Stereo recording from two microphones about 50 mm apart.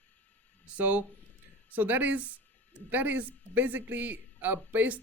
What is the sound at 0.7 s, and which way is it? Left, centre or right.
Speech, right.